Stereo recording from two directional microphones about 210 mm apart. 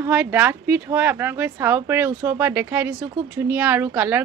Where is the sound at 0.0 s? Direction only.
10° right (ahead or behind).